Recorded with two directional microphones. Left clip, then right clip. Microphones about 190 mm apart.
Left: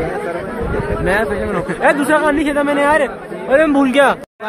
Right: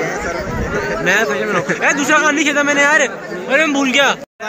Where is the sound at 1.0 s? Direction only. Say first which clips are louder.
Right 2 dB; 30° left (ahead or behind).